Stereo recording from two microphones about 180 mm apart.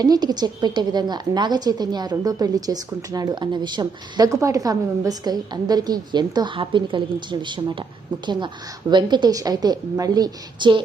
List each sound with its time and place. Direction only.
0.0 s a woman's voice: 20° right (ahead or behind)
8.9 s a woman's voice: 25° right (ahead or behind)